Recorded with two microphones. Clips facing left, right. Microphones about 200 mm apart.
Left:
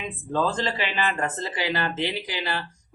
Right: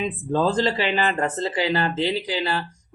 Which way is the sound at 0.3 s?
35° right (ahead or behind).